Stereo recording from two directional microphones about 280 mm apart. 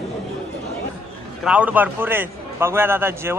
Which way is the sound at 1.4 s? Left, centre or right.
Centre.